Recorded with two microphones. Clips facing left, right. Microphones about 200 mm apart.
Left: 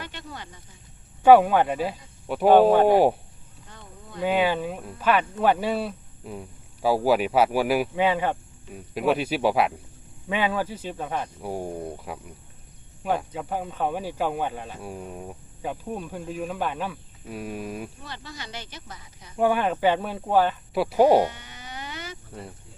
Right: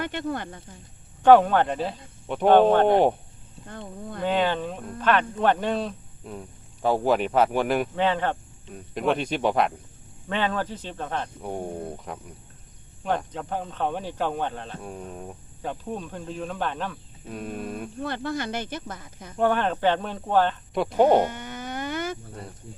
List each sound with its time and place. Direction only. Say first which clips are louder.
0.0 s speech: right 10 dB; 55° right (ahead or behind)
1.2 s speech: left 1 dB; 10° left (ahead or behind)
3.7 s speech: right 9 dB; 55° right (ahead or behind)
4.2 s speech: left 1 dB; 10° left (ahead or behind)
18.0 s speech: right 11 dB; 55° right (ahead or behind)
19.4 s speech: left 1 dB; 10° left (ahead or behind)
21.2 s a sound: right 5 dB; 50° right (ahead or behind)